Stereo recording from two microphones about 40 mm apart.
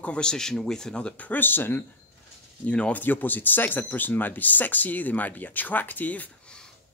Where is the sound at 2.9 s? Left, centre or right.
Left.